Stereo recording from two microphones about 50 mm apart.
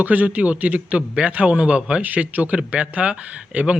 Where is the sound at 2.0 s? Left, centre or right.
Right.